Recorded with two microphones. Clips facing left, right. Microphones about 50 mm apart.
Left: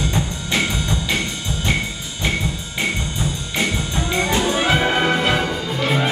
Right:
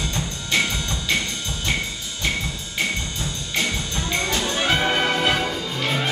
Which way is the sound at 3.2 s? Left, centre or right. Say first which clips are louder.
Left 3 dB; centre.